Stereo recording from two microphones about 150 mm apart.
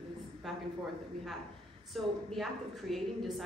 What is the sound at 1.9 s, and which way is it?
A woman's voice, centre (ahead or behind).